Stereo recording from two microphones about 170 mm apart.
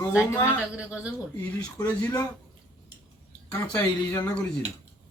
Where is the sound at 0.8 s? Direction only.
5° right (ahead or behind).